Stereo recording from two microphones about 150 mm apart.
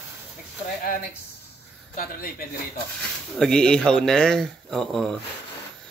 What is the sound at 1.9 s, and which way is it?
Speech, 70° left (ahead or behind).